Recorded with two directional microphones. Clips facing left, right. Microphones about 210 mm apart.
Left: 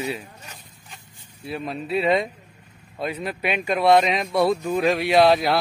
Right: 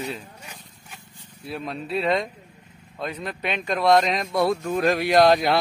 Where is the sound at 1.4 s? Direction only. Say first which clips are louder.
Left 2 dB; centre (ahead or behind).